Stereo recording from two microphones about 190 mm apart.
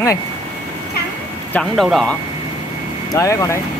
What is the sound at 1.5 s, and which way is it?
Speech, centre (ahead or behind).